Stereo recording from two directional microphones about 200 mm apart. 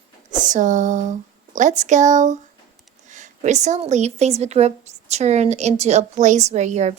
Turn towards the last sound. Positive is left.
turn(degrees=-35)  # may be behind; listen again after turning